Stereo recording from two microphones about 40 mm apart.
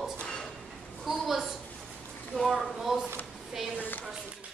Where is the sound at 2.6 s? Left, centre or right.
Centre.